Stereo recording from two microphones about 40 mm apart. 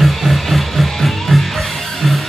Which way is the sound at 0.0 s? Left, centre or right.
Centre.